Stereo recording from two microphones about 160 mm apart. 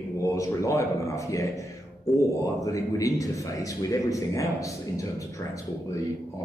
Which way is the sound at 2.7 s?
20° left (ahead or behind).